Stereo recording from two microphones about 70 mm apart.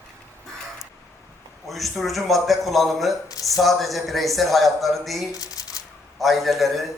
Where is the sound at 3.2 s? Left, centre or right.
Left.